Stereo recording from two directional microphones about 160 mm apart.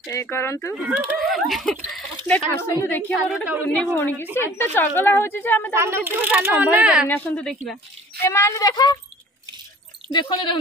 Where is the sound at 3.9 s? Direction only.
10° left (ahead or behind).